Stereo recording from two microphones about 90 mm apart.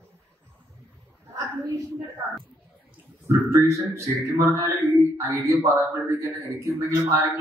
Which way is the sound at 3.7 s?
35° right (ahead or behind).